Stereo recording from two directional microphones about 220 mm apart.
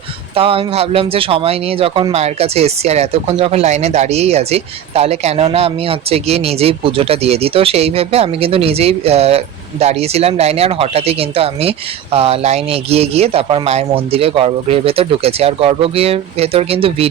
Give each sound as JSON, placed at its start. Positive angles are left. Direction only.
{"t": 0.3, "sound": "speech", "side_deg": -25}